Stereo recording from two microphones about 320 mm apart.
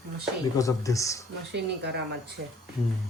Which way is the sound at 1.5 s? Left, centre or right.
Right.